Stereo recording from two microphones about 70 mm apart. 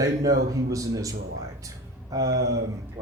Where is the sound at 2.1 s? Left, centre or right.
Right.